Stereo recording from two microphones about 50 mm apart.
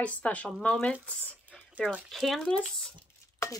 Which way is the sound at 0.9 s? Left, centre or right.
Right.